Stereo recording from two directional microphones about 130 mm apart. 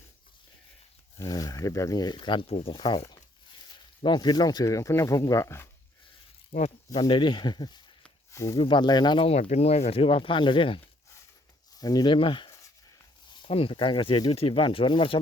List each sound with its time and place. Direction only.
1.2 s speech: 25° left (ahead or behind)
6.5 s speech: 40° left (ahead or behind)
8.3 s speech: 25° left (ahead or behind)
8.5 s speech: 40° left (ahead or behind)
9.3 s speech: 60° left (ahead or behind); by 10.8 s 40° left (ahead or behind)
11.8 s speech: 30° left (ahead or behind)